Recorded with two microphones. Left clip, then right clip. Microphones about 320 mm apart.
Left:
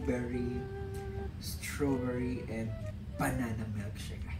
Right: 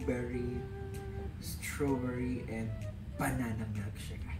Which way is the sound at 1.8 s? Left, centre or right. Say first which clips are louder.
Left 1 dB; centre.